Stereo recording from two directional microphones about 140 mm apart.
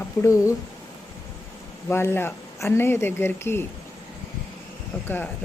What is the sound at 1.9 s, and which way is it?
Speech, 15° left (ahead or behind).